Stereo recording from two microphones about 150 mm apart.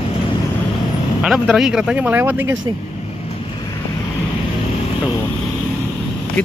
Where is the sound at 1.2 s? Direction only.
5° right (ahead or behind).